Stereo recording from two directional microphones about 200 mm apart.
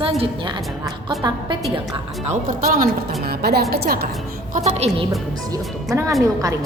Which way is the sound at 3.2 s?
50° right (ahead or behind).